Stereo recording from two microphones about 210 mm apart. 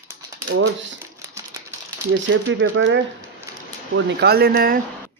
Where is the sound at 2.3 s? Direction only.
60° right (ahead or behind); by 4.7 s 45° right (ahead or behind).